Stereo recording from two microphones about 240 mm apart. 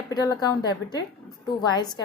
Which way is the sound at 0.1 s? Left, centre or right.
Centre.